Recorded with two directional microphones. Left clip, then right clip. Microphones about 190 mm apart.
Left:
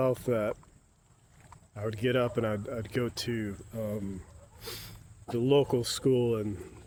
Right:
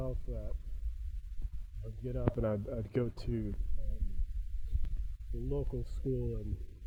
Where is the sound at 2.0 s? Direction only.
25° left (ahead or behind).